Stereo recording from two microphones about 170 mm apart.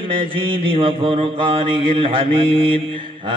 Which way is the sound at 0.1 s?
30° right (ahead or behind).